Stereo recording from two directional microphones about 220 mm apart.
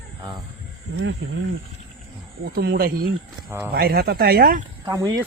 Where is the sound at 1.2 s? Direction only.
55° right (ahead or behind).